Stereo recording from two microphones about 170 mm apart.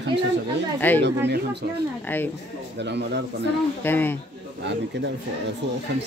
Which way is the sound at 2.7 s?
90° right.